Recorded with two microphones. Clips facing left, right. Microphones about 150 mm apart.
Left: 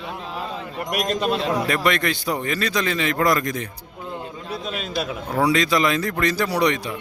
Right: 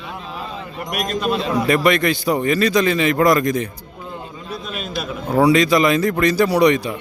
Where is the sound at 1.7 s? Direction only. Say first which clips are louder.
Right 5 dB; 10° right (ahead or behind).